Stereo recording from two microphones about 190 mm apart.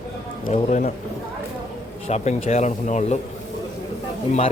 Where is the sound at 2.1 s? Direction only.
35° left (ahead or behind).